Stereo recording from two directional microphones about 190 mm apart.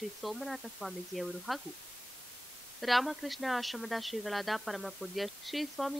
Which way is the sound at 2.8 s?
Centre (ahead or behind).